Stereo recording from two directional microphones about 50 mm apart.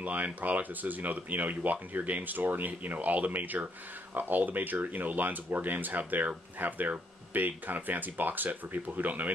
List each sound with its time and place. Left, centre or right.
0.0 s speech: right